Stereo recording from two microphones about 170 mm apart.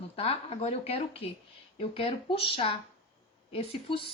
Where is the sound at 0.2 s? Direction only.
35° left (ahead or behind).